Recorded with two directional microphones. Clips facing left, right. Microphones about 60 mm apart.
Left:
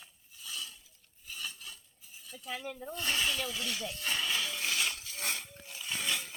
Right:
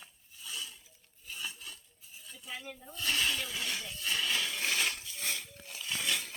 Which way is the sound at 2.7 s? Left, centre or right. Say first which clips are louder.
Right 1 dB; left.